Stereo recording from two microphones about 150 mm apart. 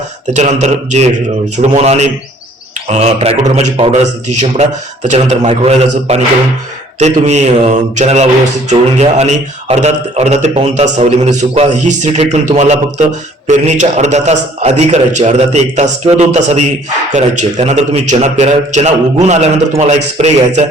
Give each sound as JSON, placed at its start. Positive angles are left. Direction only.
{"t": 0.3, "sound": "a man's voice", "side_deg": -50}